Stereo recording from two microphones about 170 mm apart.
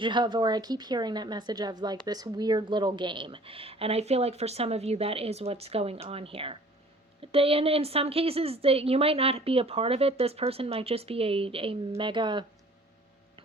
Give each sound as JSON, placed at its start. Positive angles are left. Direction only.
{"t": 0.0, "sound": "a woman's voice", "side_deg": -25}